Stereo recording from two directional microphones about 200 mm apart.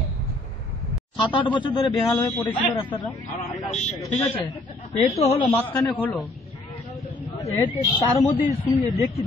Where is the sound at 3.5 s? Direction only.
30° left (ahead or behind).